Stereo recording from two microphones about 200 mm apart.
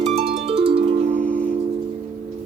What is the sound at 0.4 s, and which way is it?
Harp, 30° right (ahead or behind).